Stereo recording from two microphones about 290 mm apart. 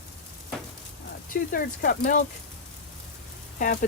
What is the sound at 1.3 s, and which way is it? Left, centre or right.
Speech, left.